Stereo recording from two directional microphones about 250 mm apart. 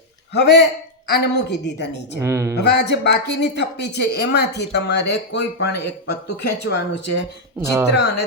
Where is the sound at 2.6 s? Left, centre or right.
Left.